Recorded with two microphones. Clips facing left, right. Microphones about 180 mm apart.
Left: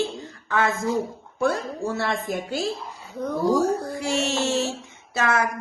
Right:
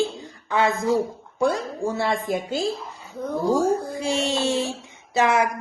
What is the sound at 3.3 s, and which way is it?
Speech, 15° right (ahead or behind).